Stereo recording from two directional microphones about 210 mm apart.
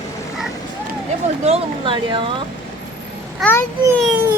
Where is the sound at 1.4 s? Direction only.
25° right (ahead or behind).